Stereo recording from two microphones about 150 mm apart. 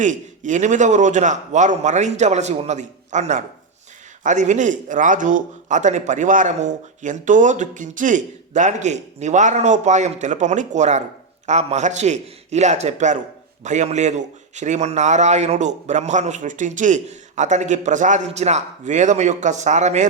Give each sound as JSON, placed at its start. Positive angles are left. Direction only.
{"t": 0.0, "sound": "a man's voice", "side_deg": -55}